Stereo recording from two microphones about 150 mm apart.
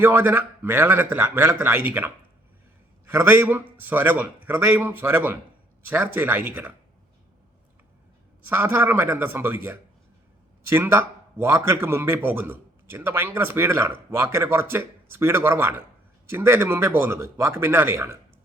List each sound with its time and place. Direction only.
0.0 s a man's voice: 15° right (ahead or behind)
3.1 s a man's voice: 10° right (ahead or behind)
8.4 s a man's voice: 15° right (ahead or behind)